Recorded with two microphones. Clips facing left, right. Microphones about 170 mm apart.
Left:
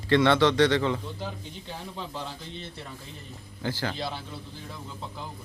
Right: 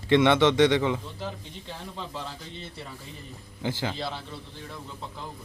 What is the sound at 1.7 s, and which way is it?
A man's voice, centre (ahead or behind).